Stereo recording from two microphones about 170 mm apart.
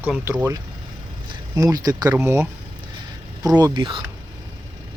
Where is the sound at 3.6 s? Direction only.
30° right (ahead or behind).